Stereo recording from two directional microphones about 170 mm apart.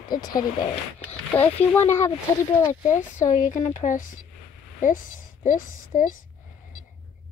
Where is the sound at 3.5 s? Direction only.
45° left (ahead or behind).